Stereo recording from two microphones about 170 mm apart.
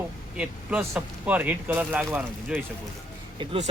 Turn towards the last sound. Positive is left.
turn(degrees=-35)  # may be behind; listen again after turning